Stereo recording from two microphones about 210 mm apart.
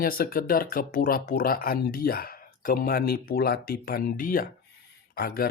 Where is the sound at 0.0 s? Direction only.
45° left (ahead or behind).